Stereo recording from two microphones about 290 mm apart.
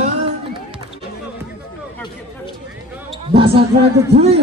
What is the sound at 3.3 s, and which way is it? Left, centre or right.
Speech, centre.